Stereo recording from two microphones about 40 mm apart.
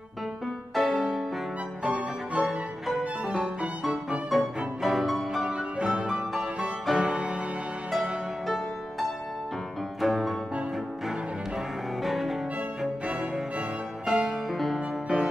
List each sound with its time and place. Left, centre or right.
0.7 s music: centre
1.8 s music: centre
2.3 s music: centre
4.3 s music: centre
5.4 s music: right
9.9 s music: centre
11.1 s cello: centre
14.0 s music: centre